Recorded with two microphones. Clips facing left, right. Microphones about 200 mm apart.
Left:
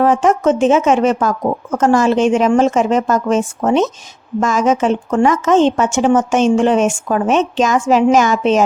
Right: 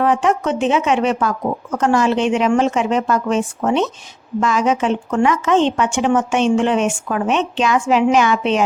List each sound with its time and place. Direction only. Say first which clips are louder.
0.0 s a woman's voice: left 4 dB; 45° left (ahead or behind)